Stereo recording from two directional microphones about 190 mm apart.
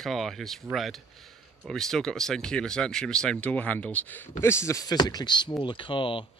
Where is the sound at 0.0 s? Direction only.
Centre (ahead or behind).